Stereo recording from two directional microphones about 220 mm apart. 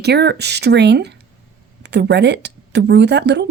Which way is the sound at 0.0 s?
50° right (ahead or behind).